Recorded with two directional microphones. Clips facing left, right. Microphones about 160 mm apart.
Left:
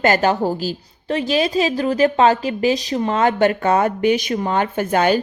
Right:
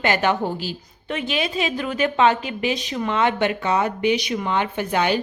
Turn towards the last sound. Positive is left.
turn(degrees=45)  # may be behind; listen again after turning